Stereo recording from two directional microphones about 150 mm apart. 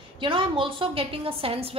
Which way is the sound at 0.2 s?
35° right (ahead or behind).